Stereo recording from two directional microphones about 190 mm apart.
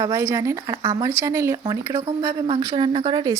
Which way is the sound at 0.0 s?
15° right (ahead or behind).